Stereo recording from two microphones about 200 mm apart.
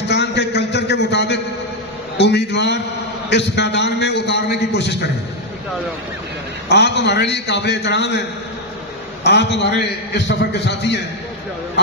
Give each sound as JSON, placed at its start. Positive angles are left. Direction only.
{"t": 0.1, "sound": "a sound", "side_deg": 60}
{"t": 2.1, "sound": "a man's voice", "side_deg": 60}
{"t": 6.7, "sound": "a man's voice", "side_deg": 60}
{"t": 9.2, "sound": "a man's voice", "side_deg": 60}